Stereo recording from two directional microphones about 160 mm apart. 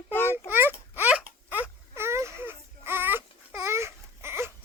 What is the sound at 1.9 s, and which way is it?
Baby cry, 15° right (ahead or behind).